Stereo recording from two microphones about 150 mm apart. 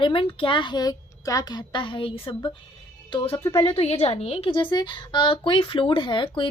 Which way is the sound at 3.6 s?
40° left (ahead or behind).